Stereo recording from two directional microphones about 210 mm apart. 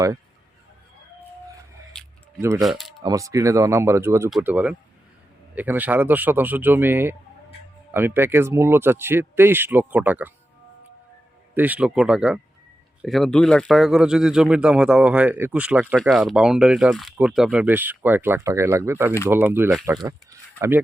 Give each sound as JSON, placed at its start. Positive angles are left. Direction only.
{"t": 2.0, "sound": "a sound", "side_deg": 5}
{"t": 2.6, "sound": "speech", "side_deg": 0}
{"t": 3.0, "sound": "speech", "side_deg": -15}
{"t": 11.5, "sound": "speech", "side_deg": -10}